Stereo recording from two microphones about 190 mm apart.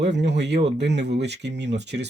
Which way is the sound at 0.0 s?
65° right (ahead or behind).